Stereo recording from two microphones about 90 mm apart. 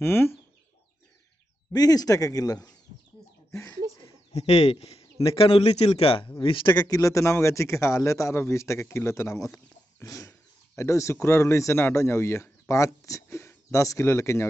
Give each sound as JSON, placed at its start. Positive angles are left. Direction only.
{"t": 0.0, "sound": "chicken", "side_deg": 25}
{"t": 1.7, "sound": "speech", "side_deg": 45}
{"t": 3.9, "sound": "a sound", "side_deg": 40}
{"t": 5.3, "sound": "a man's voice", "side_deg": 90}
{"t": 6.4, "sound": "a man's voice", "side_deg": 70}
{"t": 6.7, "sound": "speech", "side_deg": 45}